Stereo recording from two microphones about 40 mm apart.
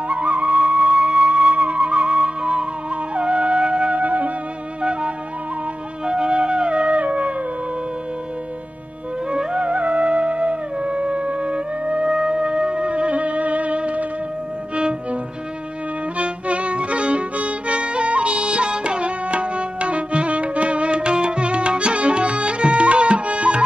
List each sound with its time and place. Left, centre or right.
0.1 s flute: right
4.0 s music: right
6.0 s music: right
9.3 s music: right
16.2 s music: right